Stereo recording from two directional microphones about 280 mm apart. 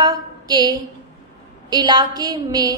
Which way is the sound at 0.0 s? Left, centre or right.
Centre.